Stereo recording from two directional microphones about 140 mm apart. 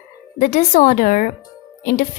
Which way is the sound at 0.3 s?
65° left (ahead or behind).